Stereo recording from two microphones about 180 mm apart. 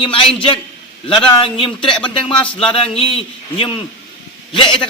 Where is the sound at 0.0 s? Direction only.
30° left (ahead or behind).